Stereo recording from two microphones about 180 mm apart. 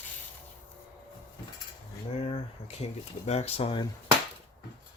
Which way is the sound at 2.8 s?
35° left (ahead or behind).